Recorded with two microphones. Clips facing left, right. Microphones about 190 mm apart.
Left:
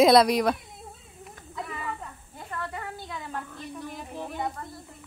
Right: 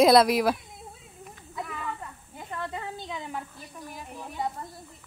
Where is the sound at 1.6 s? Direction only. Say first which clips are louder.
Left 1 dB; 5° left (ahead or behind).